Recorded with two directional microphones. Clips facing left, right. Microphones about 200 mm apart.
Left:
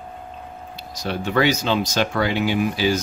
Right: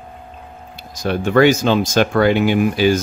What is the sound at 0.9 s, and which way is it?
Speech, 50° right (ahead or behind).